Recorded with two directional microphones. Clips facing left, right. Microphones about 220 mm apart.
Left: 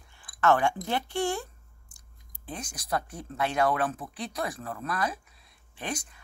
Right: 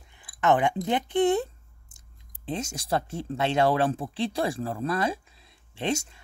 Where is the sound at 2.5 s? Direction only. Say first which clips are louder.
Right 5 dB; 25° right (ahead or behind).